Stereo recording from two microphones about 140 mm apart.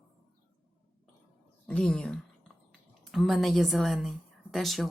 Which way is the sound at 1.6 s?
5° left (ahead or behind).